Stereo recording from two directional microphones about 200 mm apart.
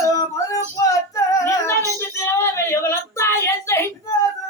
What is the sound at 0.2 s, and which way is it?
Music, 15° left (ahead or behind).